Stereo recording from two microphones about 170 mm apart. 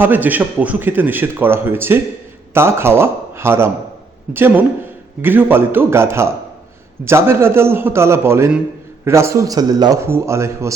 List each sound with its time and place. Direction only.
0.0 s a man's voice: 10° right (ahead or behind)